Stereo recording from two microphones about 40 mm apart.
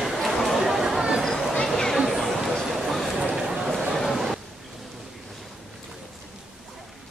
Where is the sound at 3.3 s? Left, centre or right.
Centre.